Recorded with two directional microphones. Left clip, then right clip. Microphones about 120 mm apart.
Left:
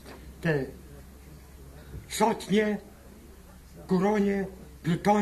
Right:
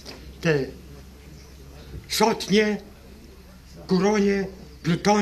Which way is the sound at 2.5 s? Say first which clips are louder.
Right 5 dB; 25° left (ahead or behind).